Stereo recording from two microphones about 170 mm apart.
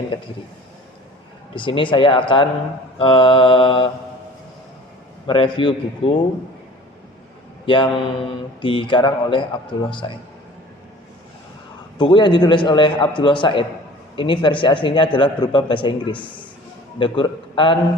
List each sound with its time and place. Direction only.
1.5 s a man's voice: 30° left (ahead or behind)
3.0 s mantra: 30° left (ahead or behind)
5.2 s a man's voice: 30° left (ahead or behind)
7.7 s a man's voice: 30° left (ahead or behind)
11.9 s a man's voice: 30° left (ahead or behind)